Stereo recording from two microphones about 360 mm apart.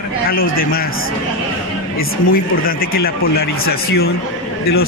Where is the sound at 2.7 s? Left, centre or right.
Left.